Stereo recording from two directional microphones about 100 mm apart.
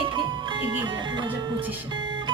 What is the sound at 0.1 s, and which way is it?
Music, 50° right (ahead or behind).